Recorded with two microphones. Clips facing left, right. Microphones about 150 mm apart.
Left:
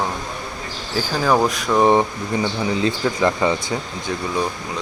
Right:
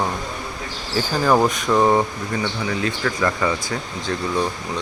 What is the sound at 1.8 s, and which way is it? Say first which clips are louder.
Speech: left 5 dB; 20° left (ahead or behind).